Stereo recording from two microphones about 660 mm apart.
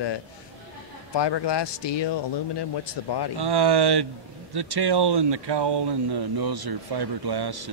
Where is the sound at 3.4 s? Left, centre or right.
Right.